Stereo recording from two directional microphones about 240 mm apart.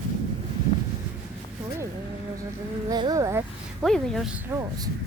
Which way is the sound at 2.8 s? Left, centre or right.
Centre.